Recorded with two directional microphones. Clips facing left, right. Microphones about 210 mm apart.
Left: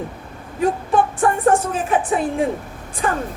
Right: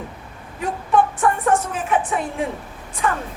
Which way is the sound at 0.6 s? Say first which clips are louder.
Left 2 dB; 30° left (ahead or behind).